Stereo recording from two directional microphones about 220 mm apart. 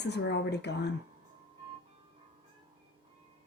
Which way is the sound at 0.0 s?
50° left (ahead or behind).